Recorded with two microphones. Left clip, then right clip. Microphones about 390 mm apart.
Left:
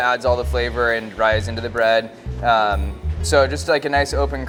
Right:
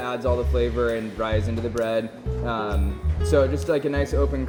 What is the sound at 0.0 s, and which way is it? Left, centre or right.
Speech, left.